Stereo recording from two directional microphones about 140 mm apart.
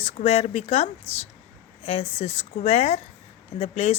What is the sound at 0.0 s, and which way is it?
A woman's voice, 50° left (ahead or behind).